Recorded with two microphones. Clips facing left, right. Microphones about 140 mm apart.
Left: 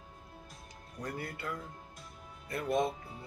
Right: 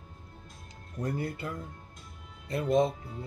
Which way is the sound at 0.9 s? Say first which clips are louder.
Right 7 dB; 25° right (ahead or behind).